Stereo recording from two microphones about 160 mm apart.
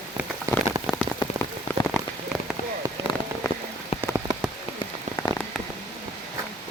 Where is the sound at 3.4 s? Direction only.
20° left (ahead or behind).